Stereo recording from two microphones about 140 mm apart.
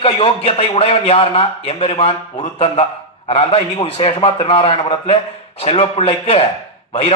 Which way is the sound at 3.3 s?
45° left (ahead or behind).